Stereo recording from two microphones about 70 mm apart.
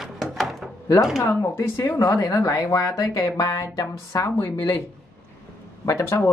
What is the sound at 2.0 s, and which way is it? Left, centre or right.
Speech, left.